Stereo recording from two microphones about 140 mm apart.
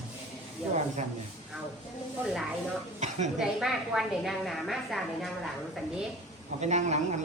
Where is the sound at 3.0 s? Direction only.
55° right (ahead or behind).